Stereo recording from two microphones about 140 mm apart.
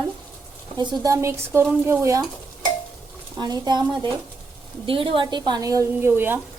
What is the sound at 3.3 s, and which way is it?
A woman's voice, 30° right (ahead or behind).